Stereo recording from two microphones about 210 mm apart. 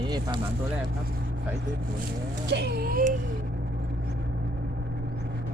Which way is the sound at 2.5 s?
50° right (ahead or behind).